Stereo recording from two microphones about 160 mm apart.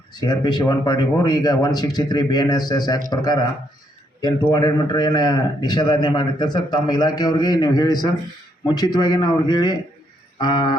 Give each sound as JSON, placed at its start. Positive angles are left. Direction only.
{"t": 0.1, "sound": "a man's voice", "side_deg": 25}
{"t": 4.5, "sound": "a man's voice", "side_deg": 25}
{"t": 10.3, "sound": "a sound", "side_deg": 25}